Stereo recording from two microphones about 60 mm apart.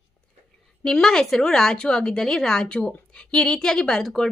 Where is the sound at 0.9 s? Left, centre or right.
Centre.